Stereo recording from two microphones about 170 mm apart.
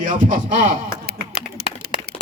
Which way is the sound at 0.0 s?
50° right (ahead or behind).